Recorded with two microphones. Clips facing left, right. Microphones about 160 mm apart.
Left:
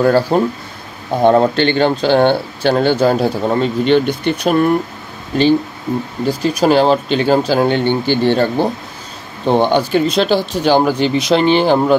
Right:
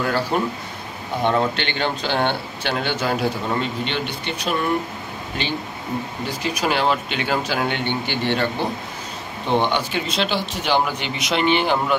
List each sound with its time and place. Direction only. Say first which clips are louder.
0.0 s speech: left 9 dB; 35° left (ahead or behind)